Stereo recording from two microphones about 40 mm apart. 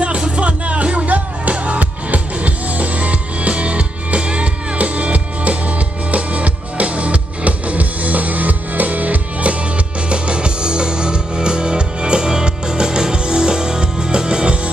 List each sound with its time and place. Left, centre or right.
0.4 s music: right